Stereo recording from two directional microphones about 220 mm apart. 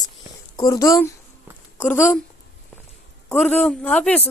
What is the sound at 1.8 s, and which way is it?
Speech, 5° left (ahead or behind).